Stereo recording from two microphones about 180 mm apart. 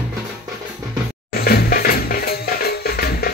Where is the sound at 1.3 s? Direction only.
60° left (ahead or behind).